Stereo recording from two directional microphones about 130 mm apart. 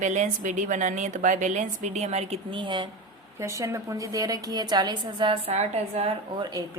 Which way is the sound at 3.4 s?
25° right (ahead or behind).